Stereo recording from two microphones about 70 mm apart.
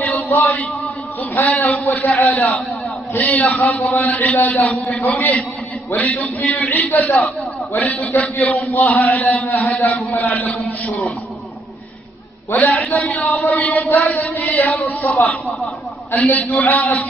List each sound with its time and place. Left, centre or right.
0.0 s chant: left
1.3 s a man's voice: left
12.4 s a man's voice: left